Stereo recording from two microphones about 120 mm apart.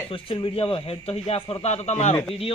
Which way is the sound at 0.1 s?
50° left (ahead or behind).